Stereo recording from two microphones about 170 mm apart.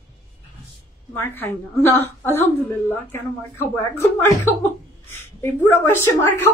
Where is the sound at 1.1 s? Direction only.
15° left (ahead or behind).